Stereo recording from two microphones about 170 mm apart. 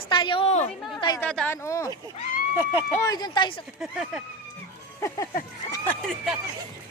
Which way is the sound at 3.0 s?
25° left (ahead or behind).